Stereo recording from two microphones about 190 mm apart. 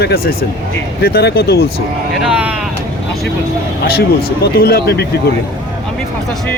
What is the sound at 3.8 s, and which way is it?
Speech, 55° left (ahead or behind).